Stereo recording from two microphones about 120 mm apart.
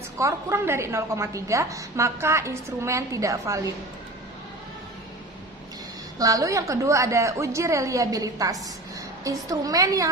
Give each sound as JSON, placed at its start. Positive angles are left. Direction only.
{"t": 0.2, "sound": "a woman's voice", "side_deg": -25}
{"t": 6.1, "sound": "a woman's voice", "side_deg": -30}